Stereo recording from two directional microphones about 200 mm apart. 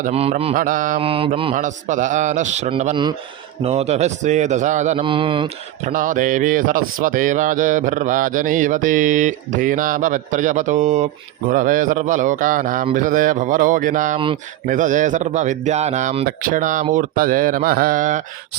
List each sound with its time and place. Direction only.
0.0 s mantra: 30° right (ahead or behind)
0.5 s speech: 40° right (ahead or behind)
1.0 s mantra: 30° right (ahead or behind)
1.5 s speech: 40° right (ahead or behind)
5.9 s speech: 40° right (ahead or behind)